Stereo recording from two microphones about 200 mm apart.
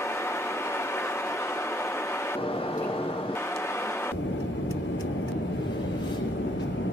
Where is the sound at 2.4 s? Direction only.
25° left (ahead or behind).